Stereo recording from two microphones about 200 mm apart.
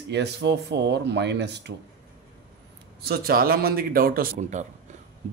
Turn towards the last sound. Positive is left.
turn(degrees=-40)  # may be behind; listen again after turning